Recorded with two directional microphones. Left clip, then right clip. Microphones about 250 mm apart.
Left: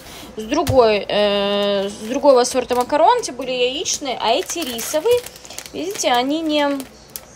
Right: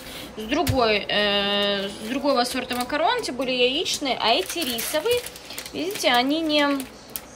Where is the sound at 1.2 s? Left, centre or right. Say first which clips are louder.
Left 4 dB; centre.